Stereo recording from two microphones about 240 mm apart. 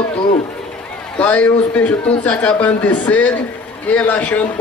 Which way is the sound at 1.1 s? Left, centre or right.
Centre.